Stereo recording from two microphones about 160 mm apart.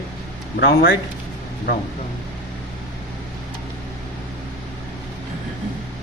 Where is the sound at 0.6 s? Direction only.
80° left.